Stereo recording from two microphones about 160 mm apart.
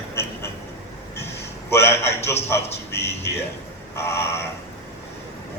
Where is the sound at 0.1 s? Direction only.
15° left (ahead or behind).